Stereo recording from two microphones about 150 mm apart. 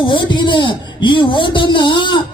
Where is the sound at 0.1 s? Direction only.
30° left (ahead or behind).